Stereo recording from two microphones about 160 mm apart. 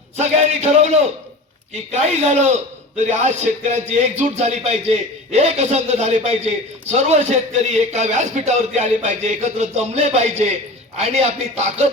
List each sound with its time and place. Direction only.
0.2 s a man's voice: 45° right (ahead or behind)